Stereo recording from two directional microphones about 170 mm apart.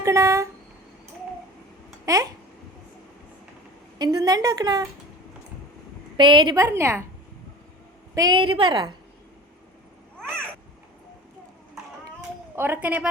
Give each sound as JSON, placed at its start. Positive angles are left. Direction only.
{"t": 0.0, "sound": "a woman's voice", "side_deg": -15}
{"t": 2.0, "sound": "a woman's voice", "side_deg": -20}
{"t": 3.9, "sound": "a woman's voice", "side_deg": -25}
{"t": 6.1, "sound": "a woman's voice", "side_deg": -30}
{"t": 8.1, "sound": "a woman's voice", "side_deg": -25}
{"t": 11.8, "sound": "a sound", "side_deg": -5}
{"t": 12.5, "sound": "a woman's voice", "side_deg": -10}